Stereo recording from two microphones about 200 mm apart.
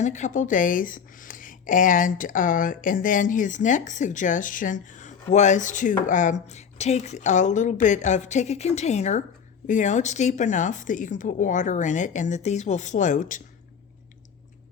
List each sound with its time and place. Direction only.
0.0 s speech: 35° left (ahead or behind)